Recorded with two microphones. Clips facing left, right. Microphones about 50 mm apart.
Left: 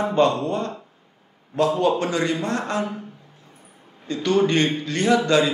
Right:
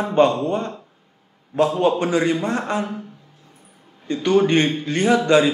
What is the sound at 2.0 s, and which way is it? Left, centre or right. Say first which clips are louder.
Speech: right 3 dB; centre.